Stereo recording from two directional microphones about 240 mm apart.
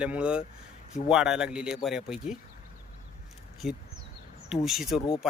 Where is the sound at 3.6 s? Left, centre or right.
Left.